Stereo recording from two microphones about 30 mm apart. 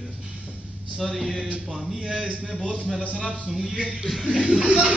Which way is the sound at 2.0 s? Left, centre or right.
Right.